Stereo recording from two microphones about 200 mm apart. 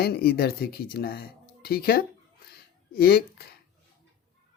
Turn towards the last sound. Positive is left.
turn(degrees=50)  # may be behind; listen again after turning